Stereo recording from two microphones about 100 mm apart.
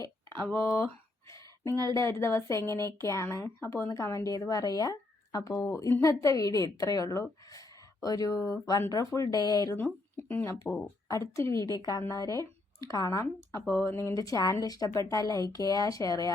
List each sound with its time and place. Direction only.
0.3 s speech: 25° left (ahead or behind)
1.3 s a sound: 30° left (ahead or behind)
1.7 s a woman's voice: 40° right (ahead or behind)
2.0 s speech: 25° left (ahead or behind)
3.8 s a woman's voice: 35° left (ahead or behind)
9.7 s a woman's voice: 15° left (ahead or behind)
11.6 s a woman's voice: 40° right (ahead or behind)
11.9 s a woman's voice: 30° left (ahead or behind)